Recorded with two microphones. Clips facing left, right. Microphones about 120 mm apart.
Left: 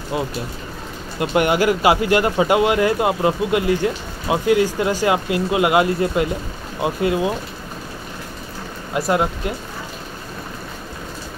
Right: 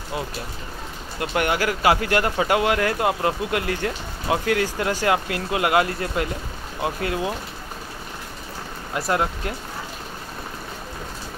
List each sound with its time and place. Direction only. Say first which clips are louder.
1.2 s speech: left 6 dB; 15° left (ahead or behind)
8.9 s speech: left 4 dB; 15° left (ahead or behind)